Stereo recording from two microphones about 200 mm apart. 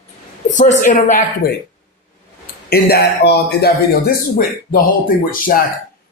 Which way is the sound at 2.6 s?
50° left (ahead or behind).